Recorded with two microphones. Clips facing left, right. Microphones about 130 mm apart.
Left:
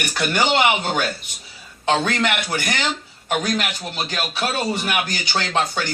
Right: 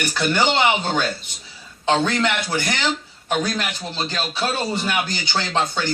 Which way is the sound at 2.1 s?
15° left (ahead or behind).